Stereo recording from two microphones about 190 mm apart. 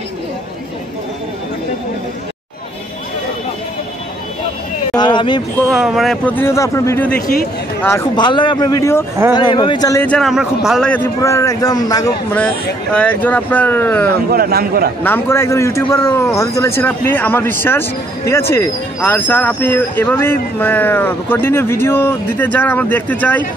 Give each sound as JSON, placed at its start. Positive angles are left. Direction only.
{"t": 4.9, "sound": "a sound", "side_deg": 25}
{"t": 5.7, "sound": "a man's voice", "side_deg": 0}
{"t": 8.2, "sound": "a man's voice", "side_deg": 25}
{"t": 10.0, "sound": "a man's voice", "side_deg": 0}
{"t": 11.1, "sound": "a man's voice", "side_deg": 15}
{"t": 12.9, "sound": "a man's voice", "side_deg": 5}
{"t": 14.3, "sound": "a man's voice", "side_deg": -50}
{"t": 15.0, "sound": "a man's voice", "side_deg": 10}